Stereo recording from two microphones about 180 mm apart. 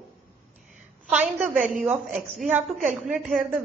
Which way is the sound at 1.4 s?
45° right (ahead or behind).